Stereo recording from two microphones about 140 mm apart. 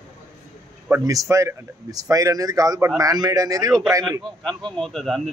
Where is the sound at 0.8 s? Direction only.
20° right (ahead or behind).